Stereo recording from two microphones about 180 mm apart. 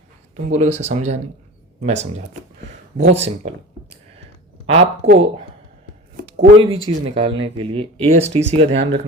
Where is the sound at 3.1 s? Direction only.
35° right (ahead or behind).